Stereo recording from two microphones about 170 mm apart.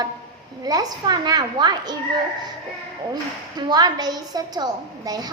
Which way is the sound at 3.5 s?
25° right (ahead or behind).